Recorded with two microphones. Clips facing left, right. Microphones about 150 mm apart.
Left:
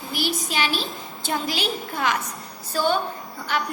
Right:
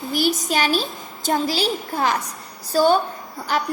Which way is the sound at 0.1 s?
45° right (ahead or behind).